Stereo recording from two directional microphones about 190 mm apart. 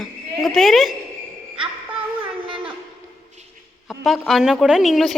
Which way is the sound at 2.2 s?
25° right (ahead or behind).